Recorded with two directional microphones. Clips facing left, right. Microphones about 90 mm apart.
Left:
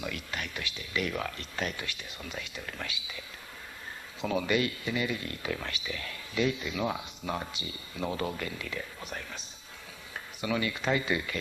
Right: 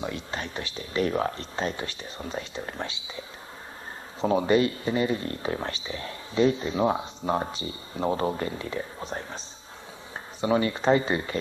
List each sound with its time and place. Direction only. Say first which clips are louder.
0.0 s speech: right 4 dB; 30° right (ahead or behind)
10.4 s speech: right 7 dB; 35° right (ahead or behind)